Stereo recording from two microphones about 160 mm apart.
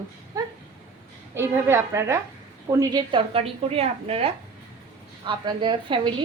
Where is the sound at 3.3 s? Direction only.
40° right (ahead or behind).